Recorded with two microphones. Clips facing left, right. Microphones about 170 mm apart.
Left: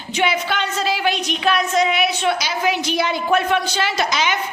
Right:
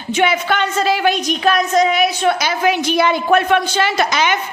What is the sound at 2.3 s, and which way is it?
A woman's voice, 55° right (ahead or behind).